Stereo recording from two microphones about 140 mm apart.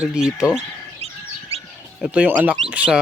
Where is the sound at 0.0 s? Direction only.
5° right (ahead or behind).